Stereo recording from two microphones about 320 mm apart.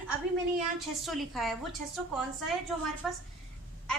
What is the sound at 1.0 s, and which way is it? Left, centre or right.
Speech, centre.